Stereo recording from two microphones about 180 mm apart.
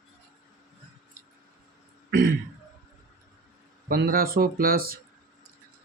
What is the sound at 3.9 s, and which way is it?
Speech, 55° right (ahead or behind).